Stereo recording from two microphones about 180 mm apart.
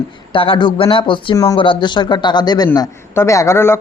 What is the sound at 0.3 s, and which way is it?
Speech, 30° left (ahead or behind).